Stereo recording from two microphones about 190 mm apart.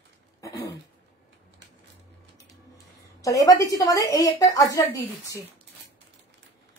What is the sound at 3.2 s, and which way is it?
A woman's voice, 20° left (ahead or behind).